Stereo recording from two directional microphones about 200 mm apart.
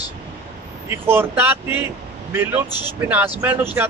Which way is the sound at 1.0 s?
10° right (ahead or behind).